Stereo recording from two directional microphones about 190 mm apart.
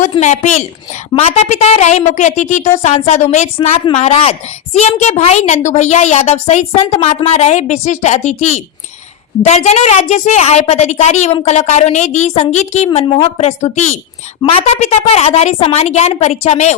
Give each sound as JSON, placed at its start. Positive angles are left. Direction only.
{"t": 0.2, "sound": "a woman's voice", "side_deg": 40}